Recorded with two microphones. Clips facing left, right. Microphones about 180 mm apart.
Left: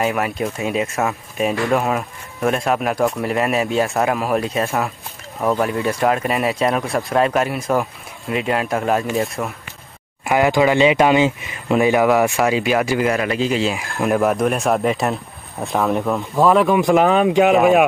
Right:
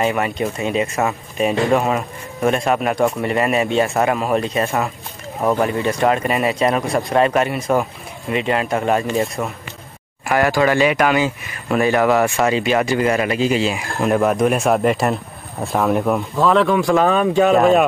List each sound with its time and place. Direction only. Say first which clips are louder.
0.0 s speech: right 1 dB; centre (ahead or behind)
10.2 s speech: left 1 dB; 20° left (ahead or behind); by 16.3 s 5° right (ahead or behind)
16.4 s speech: left 1 dB; 10° left (ahead or behind)
17.6 s speech: right 1 dB; 5° left (ahead or behind)